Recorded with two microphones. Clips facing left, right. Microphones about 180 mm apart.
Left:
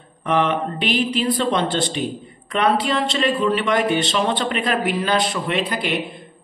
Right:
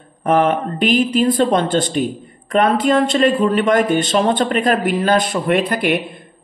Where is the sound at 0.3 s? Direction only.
45° right (ahead or behind).